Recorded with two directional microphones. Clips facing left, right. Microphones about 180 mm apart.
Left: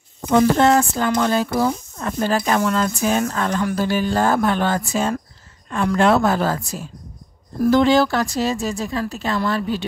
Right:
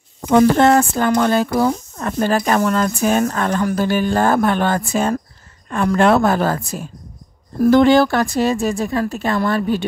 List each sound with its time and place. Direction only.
0.3 s speech: 50° right (ahead or behind)